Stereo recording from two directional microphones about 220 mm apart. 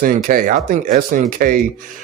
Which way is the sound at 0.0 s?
40° right (ahead or behind).